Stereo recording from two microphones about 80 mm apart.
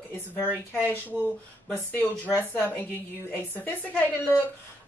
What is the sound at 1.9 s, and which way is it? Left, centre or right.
A woman's voice, left.